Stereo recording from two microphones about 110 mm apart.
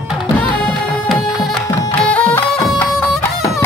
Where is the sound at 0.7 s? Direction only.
Centre (ahead or behind).